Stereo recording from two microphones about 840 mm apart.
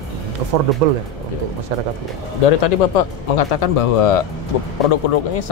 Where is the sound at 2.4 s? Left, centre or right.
Left.